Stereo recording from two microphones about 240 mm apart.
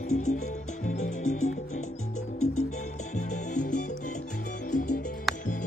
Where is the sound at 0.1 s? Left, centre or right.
Left.